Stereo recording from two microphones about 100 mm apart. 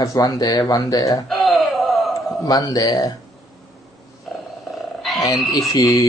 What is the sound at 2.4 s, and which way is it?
Speech, 40° left (ahead or behind).